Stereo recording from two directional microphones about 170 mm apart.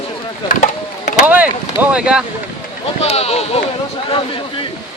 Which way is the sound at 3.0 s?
35° left (ahead or behind).